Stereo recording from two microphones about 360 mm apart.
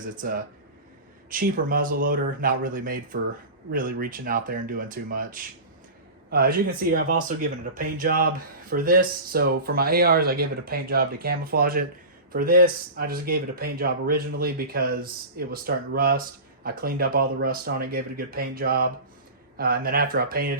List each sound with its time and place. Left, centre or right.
0.2 s speech: right